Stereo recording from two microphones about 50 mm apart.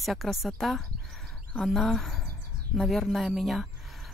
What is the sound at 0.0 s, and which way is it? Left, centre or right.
Speech, centre.